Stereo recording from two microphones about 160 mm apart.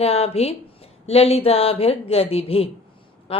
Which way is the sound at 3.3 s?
35° left (ahead or behind).